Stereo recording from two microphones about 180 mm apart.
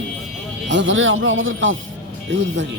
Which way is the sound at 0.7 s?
90° right.